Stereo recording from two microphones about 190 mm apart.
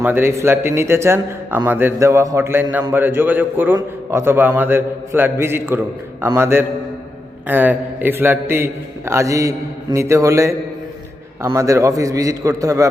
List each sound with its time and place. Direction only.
0.0 s a man's voice: 10° right (ahead or behind)